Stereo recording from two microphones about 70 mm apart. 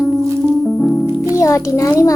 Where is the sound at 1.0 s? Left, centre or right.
Right.